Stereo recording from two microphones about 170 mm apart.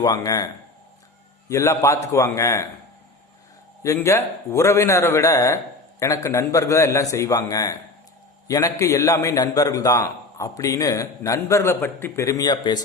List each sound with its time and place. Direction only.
0.0 s a man's voice: 20° left (ahead or behind)
3.8 s a man's voice: 15° left (ahead or behind)